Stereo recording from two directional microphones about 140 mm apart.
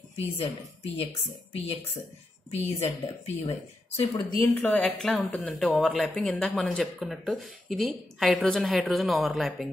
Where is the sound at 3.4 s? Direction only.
40° left (ahead or behind).